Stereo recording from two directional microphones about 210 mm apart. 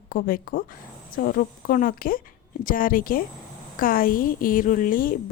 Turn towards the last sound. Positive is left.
turn(degrees=40)  # may be behind; listen again after turning